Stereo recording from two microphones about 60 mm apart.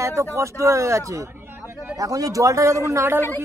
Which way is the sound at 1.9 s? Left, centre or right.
Right.